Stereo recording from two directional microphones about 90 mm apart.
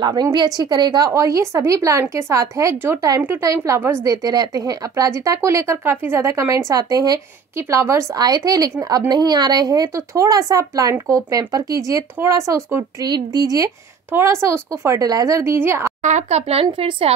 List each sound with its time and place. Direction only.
0.0 s speech: 50° right (ahead or behind)
1.0 s a woman's voice: 40° right (ahead or behind)
4.0 s a woman's voice: 45° right (ahead or behind)
7.5 s a woman's voice: 35° right (ahead or behind)
13.0 s speech: 50° right (ahead or behind)
14.1 s a woman's voice: 30° right (ahead or behind)
16.7 s a woman's voice: 90° right